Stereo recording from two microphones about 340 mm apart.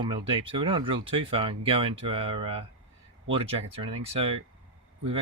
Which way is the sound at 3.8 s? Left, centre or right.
Centre.